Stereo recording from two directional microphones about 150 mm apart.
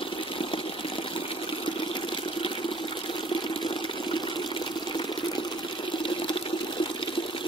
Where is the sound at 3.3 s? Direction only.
30° left (ahead or behind).